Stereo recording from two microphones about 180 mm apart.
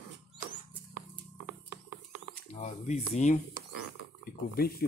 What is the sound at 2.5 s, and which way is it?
Speech, 40° left (ahead or behind).